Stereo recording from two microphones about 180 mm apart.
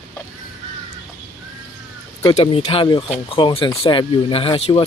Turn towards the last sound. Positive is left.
turn(degrees=30)  # may be behind; listen again after turning